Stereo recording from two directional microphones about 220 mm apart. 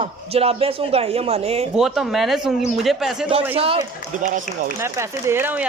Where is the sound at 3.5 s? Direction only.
25° right (ahead or behind).